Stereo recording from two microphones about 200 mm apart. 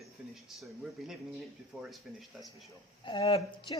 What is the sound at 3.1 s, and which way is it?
Speech, 25° left (ahead or behind).